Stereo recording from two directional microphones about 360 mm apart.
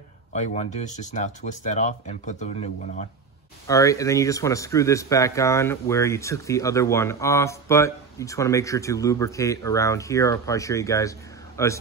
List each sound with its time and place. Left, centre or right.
0.3 s speech: centre